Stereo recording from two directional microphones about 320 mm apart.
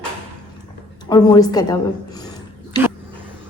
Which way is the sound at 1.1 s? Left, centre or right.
Centre.